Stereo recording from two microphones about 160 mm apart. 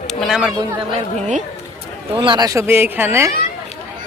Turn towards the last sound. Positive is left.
turn(degrees=-15)  # may be behind; listen again after turning